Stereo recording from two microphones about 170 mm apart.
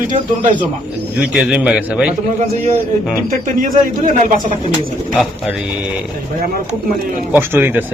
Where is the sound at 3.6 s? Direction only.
50° right (ahead or behind).